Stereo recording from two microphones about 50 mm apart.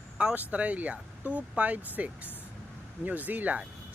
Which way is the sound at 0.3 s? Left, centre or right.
Right.